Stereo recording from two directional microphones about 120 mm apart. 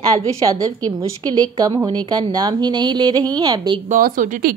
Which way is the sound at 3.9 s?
90° right.